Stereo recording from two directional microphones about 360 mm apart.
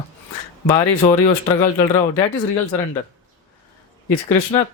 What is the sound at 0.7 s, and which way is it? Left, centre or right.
Speech, centre.